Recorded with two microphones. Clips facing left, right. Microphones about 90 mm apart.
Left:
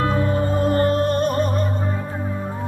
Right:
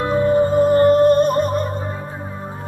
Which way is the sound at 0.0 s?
15° right (ahead or behind).